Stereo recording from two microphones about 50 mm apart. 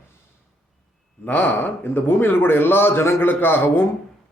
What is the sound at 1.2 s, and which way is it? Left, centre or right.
A man's voice, left.